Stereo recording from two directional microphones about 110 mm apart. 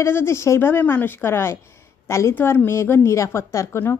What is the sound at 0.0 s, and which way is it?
A woman's voice, 25° left (ahead or behind).